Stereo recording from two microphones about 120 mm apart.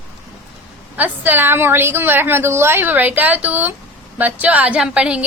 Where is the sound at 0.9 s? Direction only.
15° right (ahead or behind).